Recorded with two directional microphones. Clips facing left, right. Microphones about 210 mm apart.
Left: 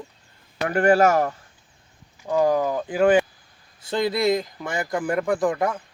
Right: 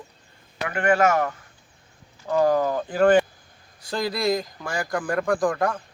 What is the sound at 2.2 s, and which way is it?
Speech, 15° left (ahead or behind).